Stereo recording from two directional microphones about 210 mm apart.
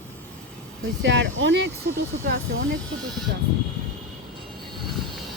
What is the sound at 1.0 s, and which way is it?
Speech, 60° right (ahead or behind).